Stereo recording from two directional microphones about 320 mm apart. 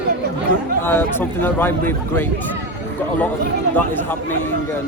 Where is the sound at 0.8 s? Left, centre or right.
Centre.